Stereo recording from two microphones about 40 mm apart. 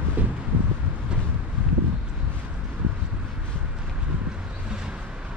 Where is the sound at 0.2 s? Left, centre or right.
Right.